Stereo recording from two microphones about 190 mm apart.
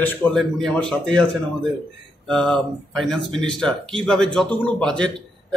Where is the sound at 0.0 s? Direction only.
5° left (ahead or behind).